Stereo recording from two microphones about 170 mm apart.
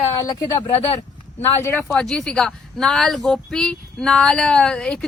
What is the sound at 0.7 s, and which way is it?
Speech, 35° left (ahead or behind).